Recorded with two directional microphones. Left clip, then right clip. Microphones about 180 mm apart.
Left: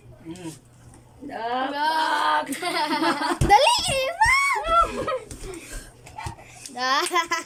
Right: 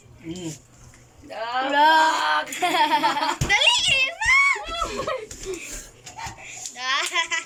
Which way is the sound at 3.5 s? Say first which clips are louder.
Left 1 dB; 50° left (ahead or behind).